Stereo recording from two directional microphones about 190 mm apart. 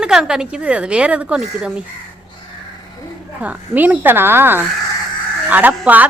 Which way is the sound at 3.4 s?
10° right (ahead or behind).